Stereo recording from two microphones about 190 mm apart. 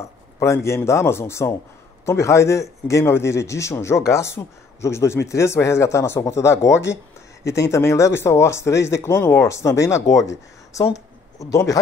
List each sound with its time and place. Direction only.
0.4 s speech: 15° left (ahead or behind)
10.7 s a sound: 15° left (ahead or behind)
11.5 s speech: 15° left (ahead or behind)